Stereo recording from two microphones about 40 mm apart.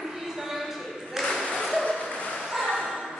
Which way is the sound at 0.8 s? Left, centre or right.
Centre.